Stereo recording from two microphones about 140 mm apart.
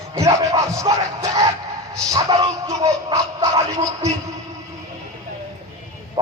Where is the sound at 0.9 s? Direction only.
35° right (ahead or behind).